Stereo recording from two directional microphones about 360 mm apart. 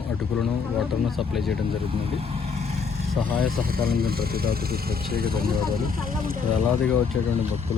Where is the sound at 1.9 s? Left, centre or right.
Centre.